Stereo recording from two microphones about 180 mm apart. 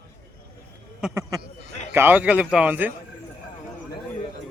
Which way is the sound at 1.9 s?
10° right (ahead or behind).